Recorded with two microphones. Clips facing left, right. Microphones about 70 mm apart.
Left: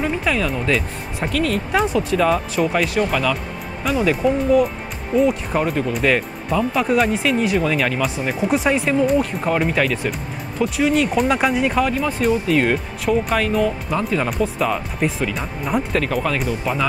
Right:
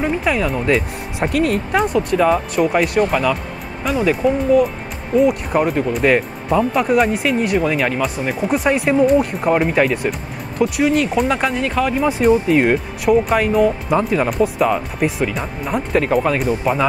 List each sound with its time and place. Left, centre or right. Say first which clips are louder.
0.0 s speech: right 2 dB; centre
1.7 s speech: right 2 dB; centre
6.6 s speech: right 2 dB; centre
12.0 s speech: right 5 dB; centre
13.0 s speech: right 4 dB; centre
14.3 s speech: right 4 dB; centre
15.9 s speech: right 4 dB; centre